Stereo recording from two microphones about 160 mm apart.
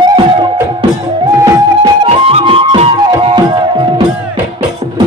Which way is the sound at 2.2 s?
35° right (ahead or behind).